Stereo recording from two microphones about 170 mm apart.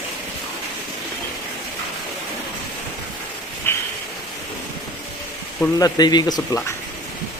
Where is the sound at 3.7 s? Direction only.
15° left (ahead or behind).